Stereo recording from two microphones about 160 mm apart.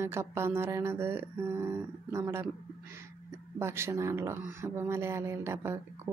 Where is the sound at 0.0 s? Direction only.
15° right (ahead or behind).